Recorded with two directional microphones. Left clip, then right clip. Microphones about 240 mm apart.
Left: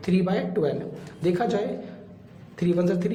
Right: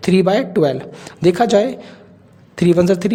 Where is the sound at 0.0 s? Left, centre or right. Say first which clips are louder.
Right 11 dB; right.